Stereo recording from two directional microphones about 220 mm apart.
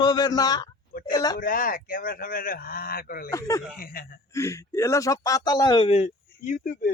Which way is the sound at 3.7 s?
40° left (ahead or behind).